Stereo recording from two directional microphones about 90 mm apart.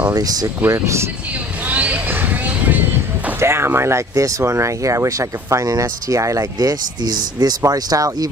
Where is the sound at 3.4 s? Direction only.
30° right (ahead or behind); by 8.2 s 45° right (ahead or behind).